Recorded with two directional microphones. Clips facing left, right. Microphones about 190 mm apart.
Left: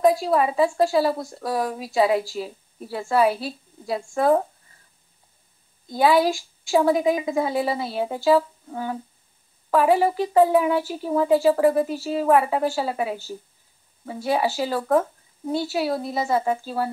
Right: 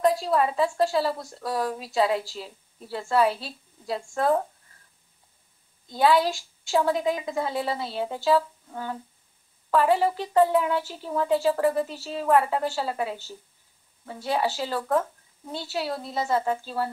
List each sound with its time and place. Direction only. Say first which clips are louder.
0.0 s speech: left 3 dB; 10° left (ahead or behind)
5.9 s speech: left 3 dB; 10° left (ahead or behind)